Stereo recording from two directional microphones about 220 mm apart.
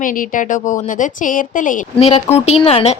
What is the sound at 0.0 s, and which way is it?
A woman's voice, 35° left (ahead or behind).